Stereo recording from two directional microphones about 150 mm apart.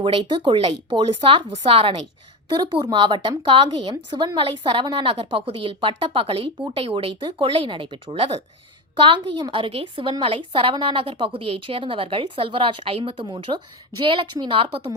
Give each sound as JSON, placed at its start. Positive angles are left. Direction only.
{"t": 0.0, "sound": "a woman's voice", "side_deg": -35}